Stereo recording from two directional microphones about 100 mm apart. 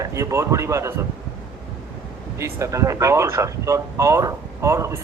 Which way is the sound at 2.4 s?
30° right (ahead or behind).